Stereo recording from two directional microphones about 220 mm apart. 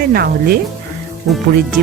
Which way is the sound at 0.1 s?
45° right (ahead or behind).